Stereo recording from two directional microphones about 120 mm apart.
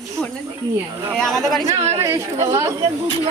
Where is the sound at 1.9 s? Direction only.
25° right (ahead or behind).